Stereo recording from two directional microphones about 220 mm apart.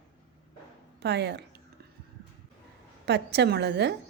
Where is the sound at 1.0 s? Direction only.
50° right (ahead or behind).